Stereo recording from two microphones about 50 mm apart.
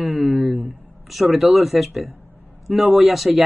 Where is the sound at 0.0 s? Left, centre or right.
Right.